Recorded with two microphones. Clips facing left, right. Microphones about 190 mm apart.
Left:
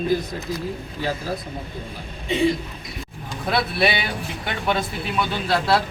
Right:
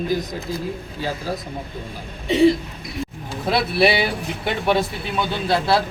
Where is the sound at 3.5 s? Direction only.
30° right (ahead or behind).